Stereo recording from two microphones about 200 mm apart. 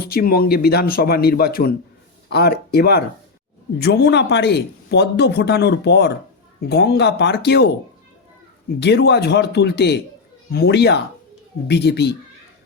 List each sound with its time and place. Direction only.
0.0 s speech: 50° left (ahead or behind)
8.8 s speech: 55° left (ahead or behind)